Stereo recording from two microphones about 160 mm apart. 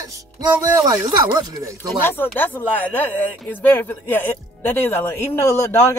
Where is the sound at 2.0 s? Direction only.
15° left (ahead or behind).